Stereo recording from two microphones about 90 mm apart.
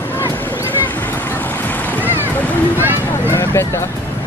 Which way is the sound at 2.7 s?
20° right (ahead or behind).